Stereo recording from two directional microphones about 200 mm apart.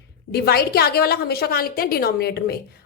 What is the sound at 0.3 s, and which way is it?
A woman's voice, 50° left (ahead or behind).